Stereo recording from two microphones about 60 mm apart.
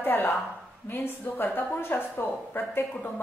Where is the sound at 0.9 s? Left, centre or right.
Left.